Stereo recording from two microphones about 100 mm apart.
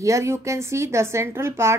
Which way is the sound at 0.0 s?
30° right (ahead or behind).